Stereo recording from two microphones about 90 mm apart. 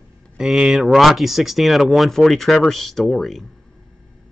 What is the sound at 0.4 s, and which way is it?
Speech, 5° right (ahead or behind).